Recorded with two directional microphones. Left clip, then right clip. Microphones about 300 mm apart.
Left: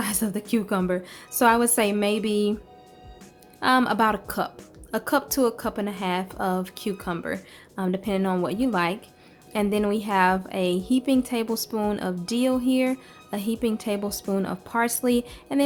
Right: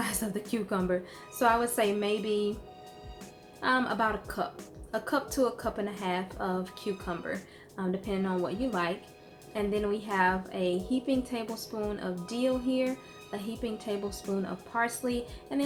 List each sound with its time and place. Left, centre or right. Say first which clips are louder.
0.0 s speech: left 5 dB; left
3.6 s a woman's voice: left 7 dB; left